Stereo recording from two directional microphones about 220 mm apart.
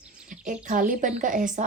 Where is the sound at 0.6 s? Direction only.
35° right (ahead or behind).